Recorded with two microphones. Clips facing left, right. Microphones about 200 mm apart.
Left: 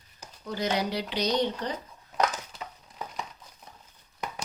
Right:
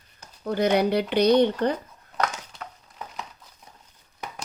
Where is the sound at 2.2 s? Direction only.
Centre (ahead or behind).